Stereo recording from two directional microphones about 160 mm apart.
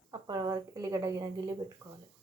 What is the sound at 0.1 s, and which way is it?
Speech, 25° right (ahead or behind).